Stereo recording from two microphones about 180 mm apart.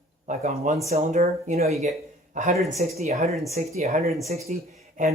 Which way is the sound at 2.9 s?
35° right (ahead or behind).